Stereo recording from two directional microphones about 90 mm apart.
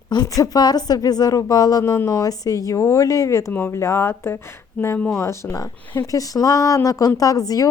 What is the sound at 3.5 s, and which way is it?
Speech, 25° left (ahead or behind).